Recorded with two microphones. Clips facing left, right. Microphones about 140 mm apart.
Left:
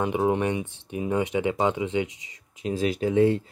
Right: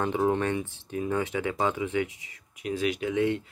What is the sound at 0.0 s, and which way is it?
Speech, 15° left (ahead or behind).